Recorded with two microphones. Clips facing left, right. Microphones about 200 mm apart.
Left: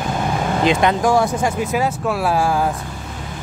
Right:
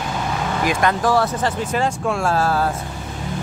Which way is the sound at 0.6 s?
20° left (ahead or behind).